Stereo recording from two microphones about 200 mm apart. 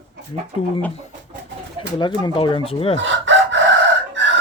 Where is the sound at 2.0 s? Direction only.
25° left (ahead or behind).